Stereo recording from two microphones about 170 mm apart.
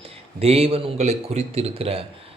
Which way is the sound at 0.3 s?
35° right (ahead or behind).